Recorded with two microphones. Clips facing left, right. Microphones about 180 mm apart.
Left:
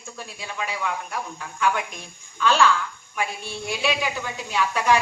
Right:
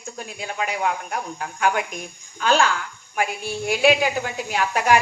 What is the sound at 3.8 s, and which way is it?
Speech, 45° right (ahead or behind).